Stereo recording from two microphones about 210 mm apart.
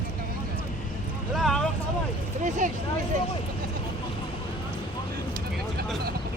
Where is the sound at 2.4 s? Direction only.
35° right (ahead or behind).